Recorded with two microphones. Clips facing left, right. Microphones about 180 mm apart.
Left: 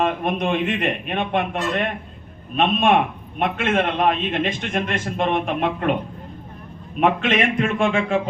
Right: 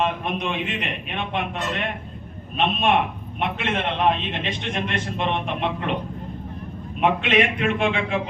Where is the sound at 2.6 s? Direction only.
50° left (ahead or behind).